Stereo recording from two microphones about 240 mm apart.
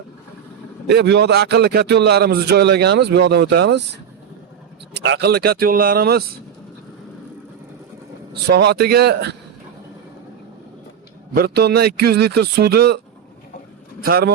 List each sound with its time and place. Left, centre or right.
0.9 s a man's voice: right
4.9 s a man's voice: right
8.4 s a man's voice: right
11.3 s a man's voice: right
14.0 s a man's voice: right